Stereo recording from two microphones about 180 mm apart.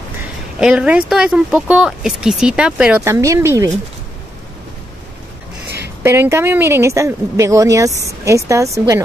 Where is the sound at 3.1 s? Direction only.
15° right (ahead or behind).